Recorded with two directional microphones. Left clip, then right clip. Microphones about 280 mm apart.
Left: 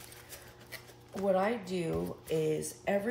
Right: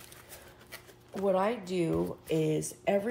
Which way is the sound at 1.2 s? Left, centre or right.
Right.